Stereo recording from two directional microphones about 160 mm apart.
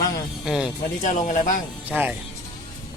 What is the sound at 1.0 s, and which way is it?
Speech, 50° left (ahead or behind).